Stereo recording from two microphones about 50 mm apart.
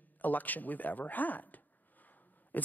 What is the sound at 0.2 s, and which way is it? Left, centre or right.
Speech, left.